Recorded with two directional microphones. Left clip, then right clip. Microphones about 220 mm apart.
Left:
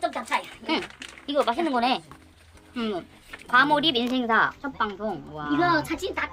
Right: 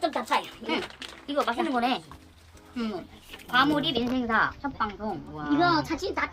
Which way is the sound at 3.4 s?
20° left (ahead or behind).